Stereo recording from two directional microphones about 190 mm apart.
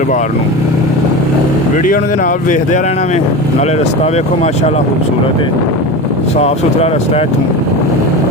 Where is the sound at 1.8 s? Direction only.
45° left (ahead or behind).